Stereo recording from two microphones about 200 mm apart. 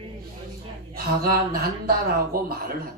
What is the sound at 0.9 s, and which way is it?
A man's voice, 50° right (ahead or behind).